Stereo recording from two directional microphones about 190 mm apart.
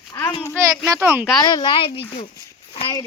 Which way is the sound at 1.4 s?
20° left (ahead or behind).